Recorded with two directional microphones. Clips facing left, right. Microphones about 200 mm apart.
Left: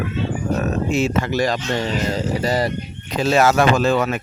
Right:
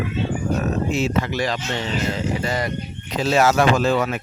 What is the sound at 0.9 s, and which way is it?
Speech, 45° left (ahead or behind).